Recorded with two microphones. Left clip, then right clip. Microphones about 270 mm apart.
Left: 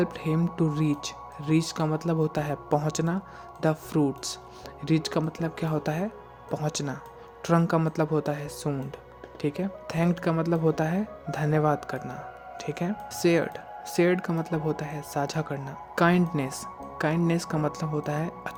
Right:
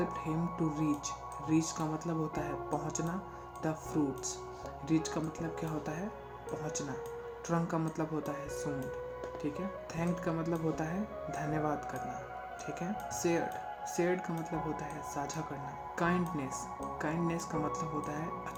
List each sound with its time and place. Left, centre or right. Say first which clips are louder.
0.0 s speech: left 7 dB; left